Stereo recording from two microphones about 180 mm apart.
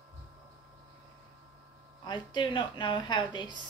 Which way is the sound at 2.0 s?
25° left (ahead or behind).